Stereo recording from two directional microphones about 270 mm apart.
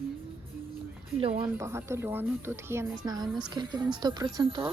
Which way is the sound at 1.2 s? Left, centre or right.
Right.